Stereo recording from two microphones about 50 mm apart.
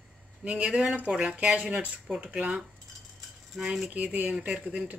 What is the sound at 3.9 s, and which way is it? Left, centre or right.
Speech, right.